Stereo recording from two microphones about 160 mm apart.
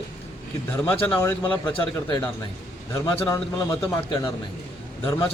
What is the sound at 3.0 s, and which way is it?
Speech, 20° left (ahead or behind).